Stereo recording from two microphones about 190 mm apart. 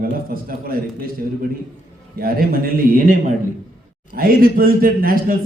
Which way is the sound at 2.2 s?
50° right (ahead or behind).